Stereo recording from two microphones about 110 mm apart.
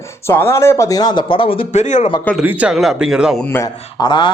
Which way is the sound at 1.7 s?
90° left.